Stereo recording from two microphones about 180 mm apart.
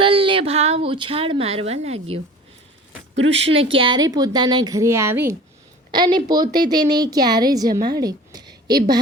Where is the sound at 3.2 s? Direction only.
90° right.